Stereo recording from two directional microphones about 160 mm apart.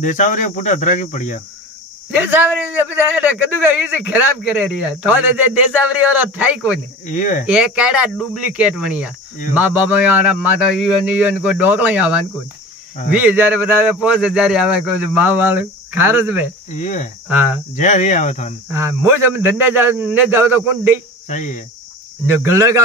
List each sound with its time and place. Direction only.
0.0 s speech: 50° left (ahead or behind)
2.0 s a man's voice: 10° right (ahead or behind)
7.1 s speech: 55° left (ahead or behind)
7.4 s a man's voice: 5° right (ahead or behind)
16.8 s speech: 50° left (ahead or behind)
17.3 s a man's voice: 10° right (ahead or behind)
17.7 s speech: 45° left (ahead or behind)
18.7 s a man's voice: 15° right (ahead or behind)
21.3 s speech: 50° left (ahead or behind)
22.2 s a man's voice: 15° right (ahead or behind)